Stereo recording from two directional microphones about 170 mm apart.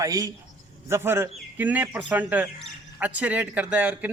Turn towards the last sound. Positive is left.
turn(degrees=-10)  # may be behind; listen again after turning